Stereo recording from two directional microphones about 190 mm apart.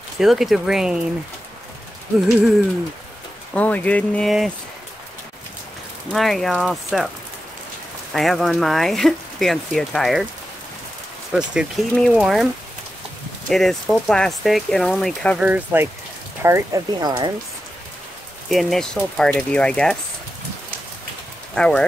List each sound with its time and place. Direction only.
0.2 s speech: centre (ahead or behind)
3.5 s speech: 5° left (ahead or behind)
6.1 s speech: centre (ahead or behind)
8.1 s speech: centre (ahead or behind)
11.3 s speech: centre (ahead or behind)
13.5 s speech: centre (ahead or behind); by 17.3 s 20° right (ahead or behind)
18.5 s speech: centre (ahead or behind)
21.5 s speech: 5° left (ahead or behind)